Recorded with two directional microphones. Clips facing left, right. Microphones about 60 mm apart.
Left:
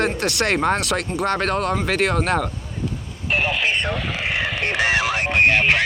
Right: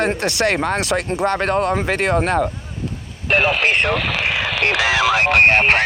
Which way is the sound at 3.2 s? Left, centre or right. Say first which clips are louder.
Right 5 dB; right.